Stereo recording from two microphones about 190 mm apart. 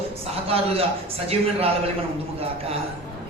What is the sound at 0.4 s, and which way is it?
A man's voice, 30° right (ahead or behind).